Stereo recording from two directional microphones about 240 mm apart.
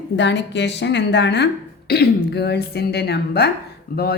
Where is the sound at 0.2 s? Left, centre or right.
Left.